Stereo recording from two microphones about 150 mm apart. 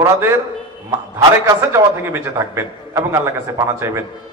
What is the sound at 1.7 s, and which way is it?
A man's voice, 15° right (ahead or behind).